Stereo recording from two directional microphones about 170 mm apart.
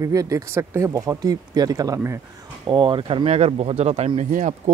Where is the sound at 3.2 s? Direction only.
40° right (ahead or behind).